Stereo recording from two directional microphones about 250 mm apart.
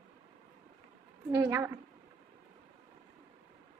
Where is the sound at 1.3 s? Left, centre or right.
Centre.